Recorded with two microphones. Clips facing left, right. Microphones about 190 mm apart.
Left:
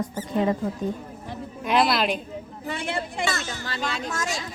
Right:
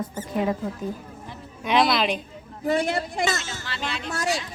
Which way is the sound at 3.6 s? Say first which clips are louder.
Left 4 dB; 40° left (ahead or behind).